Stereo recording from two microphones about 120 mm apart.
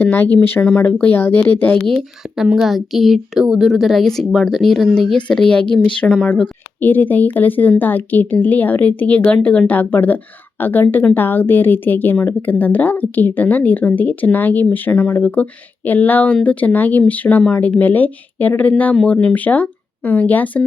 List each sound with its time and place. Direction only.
0.0 s speech: 15° left (ahead or behind)
2.0 s speech: 5° right (ahead or behind)
6.1 s speech: centre (ahead or behind)
6.4 s speech: 15° left (ahead or behind)